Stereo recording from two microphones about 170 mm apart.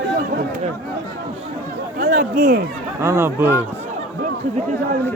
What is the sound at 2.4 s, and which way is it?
Speech, 50° right (ahead or behind).